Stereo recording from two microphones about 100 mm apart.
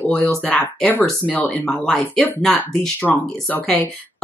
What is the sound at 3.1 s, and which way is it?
Speech, 15° left (ahead or behind).